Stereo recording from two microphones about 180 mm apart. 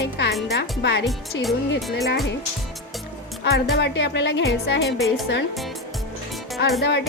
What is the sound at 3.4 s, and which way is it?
Speech, 70° left (ahead or behind).